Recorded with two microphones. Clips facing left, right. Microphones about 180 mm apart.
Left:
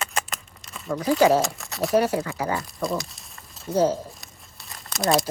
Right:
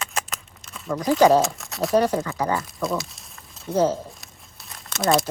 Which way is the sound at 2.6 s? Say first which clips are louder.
Right 1 dB; centre (ahead or behind).